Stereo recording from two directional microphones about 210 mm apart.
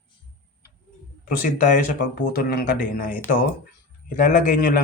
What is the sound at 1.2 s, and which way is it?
Speech, 40° left (ahead or behind).